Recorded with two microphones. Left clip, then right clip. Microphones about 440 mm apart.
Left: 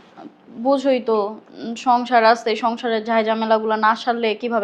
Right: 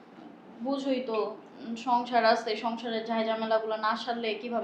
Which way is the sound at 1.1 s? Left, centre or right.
Left.